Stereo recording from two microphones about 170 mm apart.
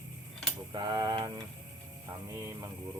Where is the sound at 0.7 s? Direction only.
25° right (ahead or behind).